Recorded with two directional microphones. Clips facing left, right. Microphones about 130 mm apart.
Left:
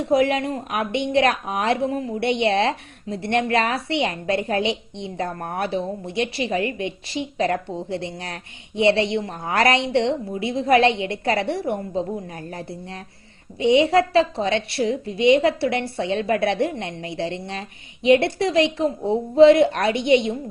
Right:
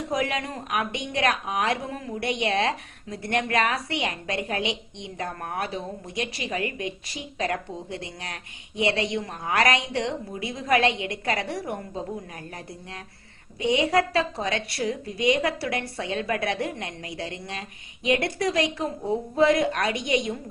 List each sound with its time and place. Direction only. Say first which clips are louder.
0.1 s a woman's voice: left 9 dB; 30° left (ahead or behind)